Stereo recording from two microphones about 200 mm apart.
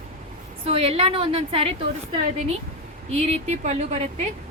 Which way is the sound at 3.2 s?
30° right (ahead or behind).